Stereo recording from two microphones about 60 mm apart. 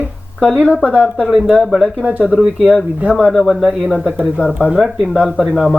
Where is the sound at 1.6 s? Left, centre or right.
Centre.